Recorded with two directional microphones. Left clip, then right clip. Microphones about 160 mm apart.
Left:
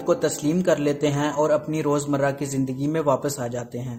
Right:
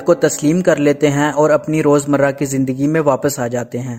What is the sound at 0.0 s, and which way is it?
A man's voice, 50° right (ahead or behind).